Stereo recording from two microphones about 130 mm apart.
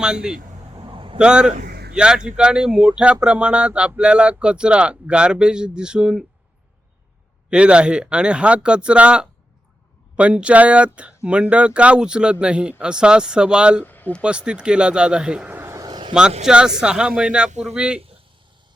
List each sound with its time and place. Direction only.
0.0 s speech: 5° right (ahead or behind)
0.8 s a sound: 40° right (ahead or behind)
1.2 s speech: 5° right (ahead or behind)
7.5 s speech: 10° right (ahead or behind)
13.8 s speech: 15° left (ahead or behind)
14.2 s speech: 10° right (ahead or behind); by 16.1 s 35° right (ahead or behind)
16.5 s speech: 5° right (ahead or behind)